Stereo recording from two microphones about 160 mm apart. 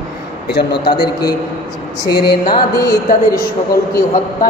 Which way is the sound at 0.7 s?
85° left.